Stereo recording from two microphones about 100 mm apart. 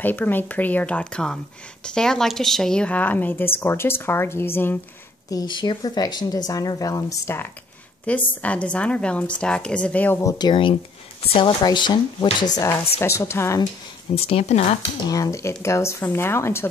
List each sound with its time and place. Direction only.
0.0 s a woman's voice: 20° left (ahead or behind)
5.3 s speech: 45° left (ahead or behind); by 7.4 s 30° left (ahead or behind)
8.1 s a woman's voice: 15° left (ahead or behind)
10.2 s speech: 45° left (ahead or behind)
12.5 s speech: 30° left (ahead or behind)
14.1 s speech: 85° left
15.0 s speech: 40° left (ahead or behind)